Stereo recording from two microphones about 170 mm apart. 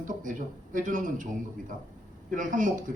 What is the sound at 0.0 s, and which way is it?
A man's voice, 50° right (ahead or behind).